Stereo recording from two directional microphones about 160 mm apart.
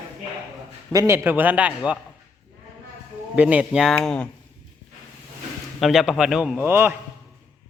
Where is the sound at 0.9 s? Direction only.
15° right (ahead or behind).